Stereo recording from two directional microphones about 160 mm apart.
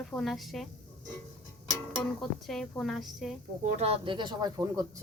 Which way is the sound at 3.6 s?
45° right (ahead or behind).